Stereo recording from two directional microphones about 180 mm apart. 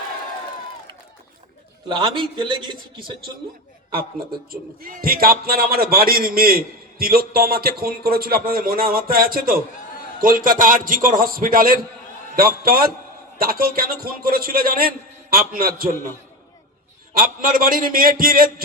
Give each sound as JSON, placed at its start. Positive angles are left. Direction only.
{"t": 1.9, "sound": "a man's voice", "side_deg": -25}
{"t": 4.8, "sound": "a man's voice", "side_deg": -55}
{"t": 17.2, "sound": "a man's voice", "side_deg": -50}